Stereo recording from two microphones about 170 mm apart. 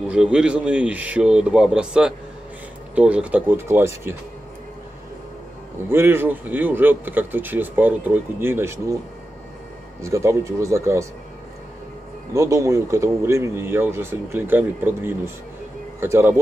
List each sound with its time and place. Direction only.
0.1 s speech: 5° right (ahead or behind)
5.9 s speech: 15° right (ahead or behind)
10.0 s speech: 15° right (ahead or behind)
12.4 s speech: 20° right (ahead or behind)